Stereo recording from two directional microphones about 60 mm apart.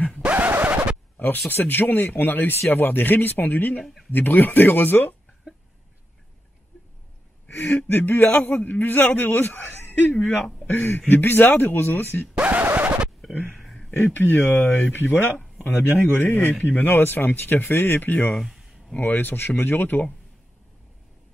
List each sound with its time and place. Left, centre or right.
0.2 s scratch: right
0.5 s scratch: right
1.5 s a man's voice: left
7.4 s a man's voice: left
12.4 s a sound: right
13.5 s a sound: centre
13.8 s a man's voice: left
18.4 s a sound: centre
18.9 s a man's voice: left